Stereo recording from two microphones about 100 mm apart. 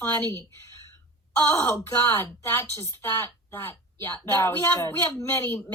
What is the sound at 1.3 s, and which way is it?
Speech, 25° left (ahead or behind).